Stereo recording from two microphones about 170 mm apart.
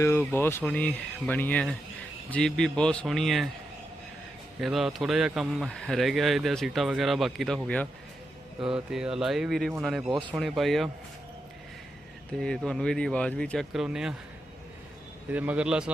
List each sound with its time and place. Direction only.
0.0 s speech: 15° left (ahead or behind)
4.6 s speech: centre (ahead or behind)
10.1 s speech: 25° right (ahead or behind)
10.3 s speech: centre (ahead or behind)
12.4 s speech: 5° left (ahead or behind)
15.3 s a man's voice: 10° right (ahead or behind)